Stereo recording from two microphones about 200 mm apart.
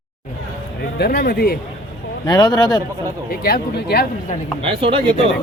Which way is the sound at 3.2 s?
50° left (ahead or behind).